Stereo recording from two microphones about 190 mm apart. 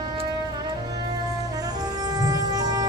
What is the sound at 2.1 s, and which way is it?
Music, 20° right (ahead or behind).